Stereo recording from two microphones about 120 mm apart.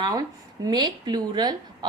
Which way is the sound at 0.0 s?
35° right (ahead or behind).